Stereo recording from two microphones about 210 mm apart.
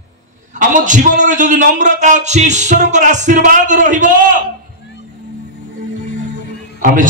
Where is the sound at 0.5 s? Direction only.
40° right (ahead or behind).